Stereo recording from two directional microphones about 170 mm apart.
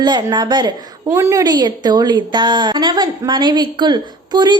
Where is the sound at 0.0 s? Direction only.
25° right (ahead or behind).